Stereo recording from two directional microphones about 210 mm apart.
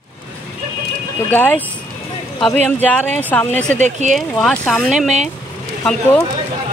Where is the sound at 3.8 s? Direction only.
35° right (ahead or behind).